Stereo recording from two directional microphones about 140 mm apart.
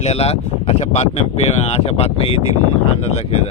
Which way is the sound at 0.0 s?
50° left (ahead or behind).